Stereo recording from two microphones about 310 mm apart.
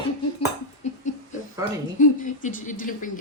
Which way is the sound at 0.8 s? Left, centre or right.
Left.